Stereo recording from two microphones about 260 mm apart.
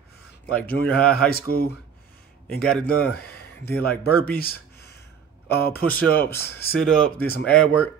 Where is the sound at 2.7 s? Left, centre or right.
Centre.